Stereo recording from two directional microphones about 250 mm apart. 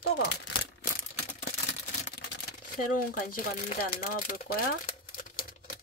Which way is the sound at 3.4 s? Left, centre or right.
Left.